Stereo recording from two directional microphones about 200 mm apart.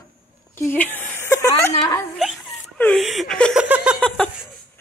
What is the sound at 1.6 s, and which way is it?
Speech, 15° left (ahead or behind).